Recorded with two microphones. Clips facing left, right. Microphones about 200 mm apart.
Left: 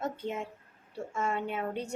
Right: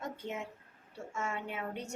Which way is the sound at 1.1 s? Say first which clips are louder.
Left 6 dB; 35° left (ahead or behind).